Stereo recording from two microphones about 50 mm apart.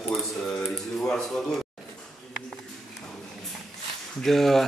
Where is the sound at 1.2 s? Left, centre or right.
Centre.